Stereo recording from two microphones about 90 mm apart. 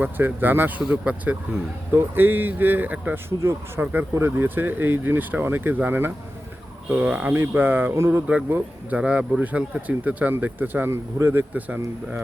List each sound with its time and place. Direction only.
0.0 s a man's voice: 20° right (ahead or behind)